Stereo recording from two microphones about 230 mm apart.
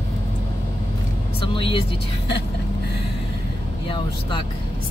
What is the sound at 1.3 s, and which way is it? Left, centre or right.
Speech, left.